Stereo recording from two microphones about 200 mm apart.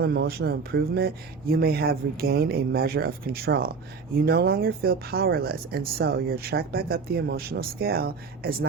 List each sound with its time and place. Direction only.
0.0 s speech: 50° right (ahead or behind)